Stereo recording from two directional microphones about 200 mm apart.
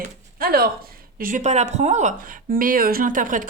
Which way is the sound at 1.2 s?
40° right (ahead or behind).